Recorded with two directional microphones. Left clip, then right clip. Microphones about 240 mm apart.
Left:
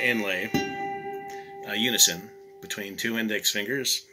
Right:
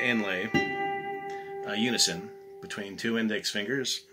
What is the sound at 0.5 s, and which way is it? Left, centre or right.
Music, left.